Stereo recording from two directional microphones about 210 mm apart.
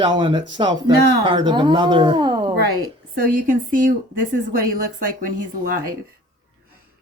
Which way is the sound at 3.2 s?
40° right (ahead or behind).